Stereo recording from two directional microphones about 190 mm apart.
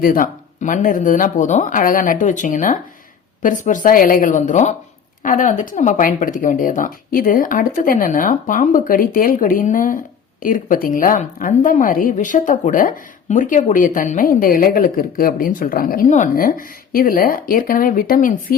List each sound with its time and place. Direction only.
0.0 s speech: 45° left (ahead or behind)